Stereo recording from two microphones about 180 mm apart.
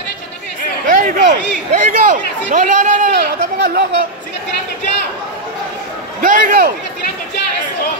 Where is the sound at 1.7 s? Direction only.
45° right (ahead or behind).